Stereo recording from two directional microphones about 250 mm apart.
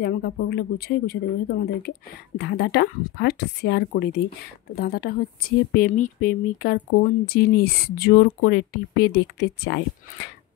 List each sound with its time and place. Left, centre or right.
0.0 s speech: left